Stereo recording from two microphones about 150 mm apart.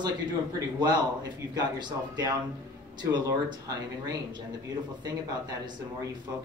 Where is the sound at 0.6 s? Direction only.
25° right (ahead or behind).